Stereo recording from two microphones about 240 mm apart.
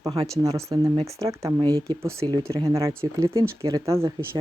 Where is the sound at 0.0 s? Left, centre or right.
Centre.